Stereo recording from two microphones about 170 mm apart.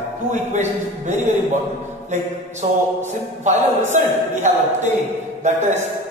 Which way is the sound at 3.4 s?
45° right (ahead or behind).